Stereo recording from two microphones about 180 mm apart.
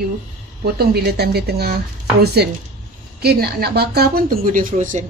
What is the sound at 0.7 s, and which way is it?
Speech, 65° right (ahead or behind).